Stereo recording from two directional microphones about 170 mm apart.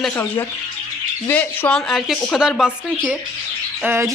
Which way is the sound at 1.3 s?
10° left (ahead or behind).